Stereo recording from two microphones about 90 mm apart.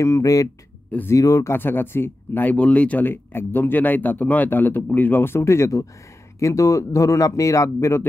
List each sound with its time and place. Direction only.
0.0 s speech: 35° left (ahead or behind)